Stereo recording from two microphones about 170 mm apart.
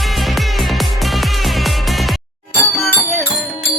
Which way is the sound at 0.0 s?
Centre (ahead or behind).